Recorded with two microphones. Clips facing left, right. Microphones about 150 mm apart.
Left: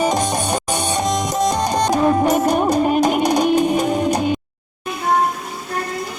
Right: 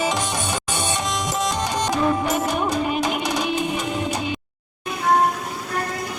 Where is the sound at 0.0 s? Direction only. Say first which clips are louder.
Left 5 dB; 45° left (ahead or behind).